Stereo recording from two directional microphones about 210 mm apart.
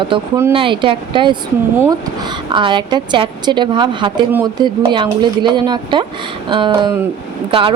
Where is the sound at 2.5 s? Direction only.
20° right (ahead or behind).